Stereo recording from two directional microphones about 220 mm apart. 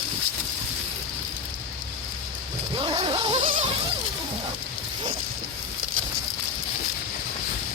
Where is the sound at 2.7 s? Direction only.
20° right (ahead or behind).